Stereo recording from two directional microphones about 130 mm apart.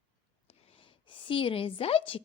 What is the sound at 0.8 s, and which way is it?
A woman's voice, 40° left (ahead or behind).